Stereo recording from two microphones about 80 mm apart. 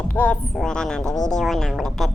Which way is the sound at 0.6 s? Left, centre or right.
Centre.